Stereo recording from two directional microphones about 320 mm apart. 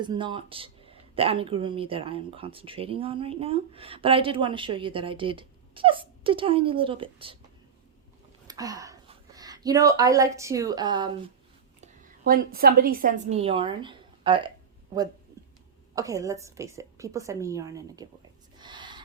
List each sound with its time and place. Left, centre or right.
0.0 s speech: centre
8.4 s speech: centre
12.2 s a woman's voice: right
16.0 s speech: centre
18.6 s owl: centre